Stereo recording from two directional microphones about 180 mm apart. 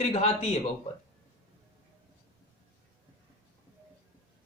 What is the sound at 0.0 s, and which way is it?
Speech, 35° left (ahead or behind).